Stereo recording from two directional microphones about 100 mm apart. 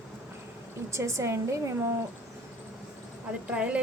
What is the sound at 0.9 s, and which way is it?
Speech, 30° right (ahead or behind).